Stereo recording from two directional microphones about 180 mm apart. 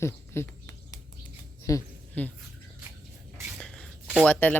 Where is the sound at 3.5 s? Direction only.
5° left (ahead or behind).